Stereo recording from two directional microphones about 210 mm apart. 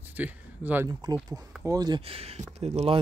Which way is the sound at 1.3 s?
15° right (ahead or behind).